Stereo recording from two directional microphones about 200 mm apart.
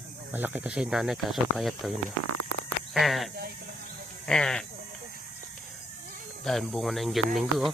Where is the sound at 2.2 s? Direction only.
90° right.